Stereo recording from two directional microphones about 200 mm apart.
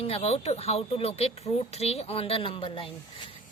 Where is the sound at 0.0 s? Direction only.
30° left (ahead or behind).